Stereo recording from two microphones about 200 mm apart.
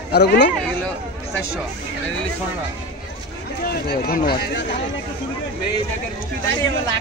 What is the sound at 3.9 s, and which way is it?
Speech, 50° left (ahead or behind).